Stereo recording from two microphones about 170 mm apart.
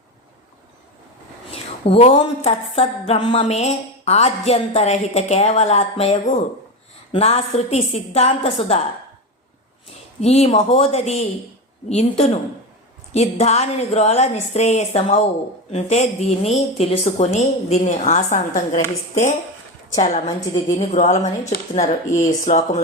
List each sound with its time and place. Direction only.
1.5 s a woman's voice: 35° left (ahead or behind)
10.2 s a woman's voice: 40° left (ahead or behind)
20.0 s a woman's voice: 40° left (ahead or behind)